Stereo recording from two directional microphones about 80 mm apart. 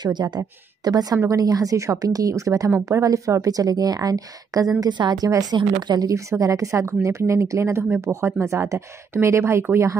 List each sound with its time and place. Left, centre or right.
0.0 s speech: right
0.4 s a woman's voice: right